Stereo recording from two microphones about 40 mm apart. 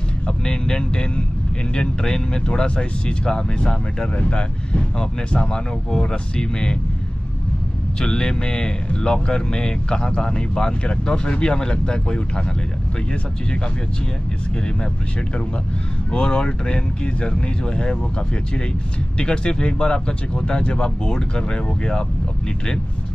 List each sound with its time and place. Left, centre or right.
0.5 s speech: left
8.0 s speech: centre
16.1 s speech: left
19.1 s speech: left